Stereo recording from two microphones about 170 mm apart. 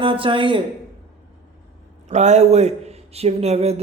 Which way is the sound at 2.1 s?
40° right (ahead or behind).